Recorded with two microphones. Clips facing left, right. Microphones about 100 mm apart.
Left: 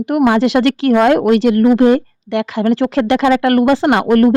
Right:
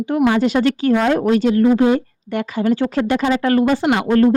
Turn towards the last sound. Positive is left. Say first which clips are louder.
# left 3 dB
turn(degrees=65)  # may be behind; listen again after turning